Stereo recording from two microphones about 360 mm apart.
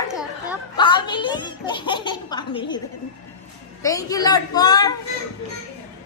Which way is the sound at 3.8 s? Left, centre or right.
Centre.